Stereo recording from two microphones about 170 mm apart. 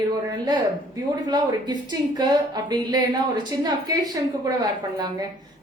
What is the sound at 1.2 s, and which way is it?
A woman's voice, 25° right (ahead or behind).